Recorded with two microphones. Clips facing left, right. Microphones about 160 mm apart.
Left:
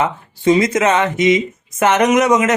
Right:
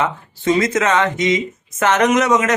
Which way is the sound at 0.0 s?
20° left (ahead or behind).